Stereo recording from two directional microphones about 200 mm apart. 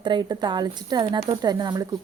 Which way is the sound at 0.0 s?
20° right (ahead or behind).